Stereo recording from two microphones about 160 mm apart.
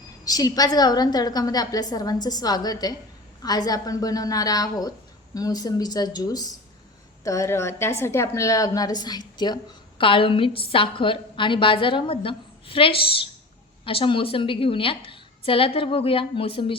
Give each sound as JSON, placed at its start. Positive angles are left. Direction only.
{"t": 0.3, "sound": "a woman's voice", "side_deg": 25}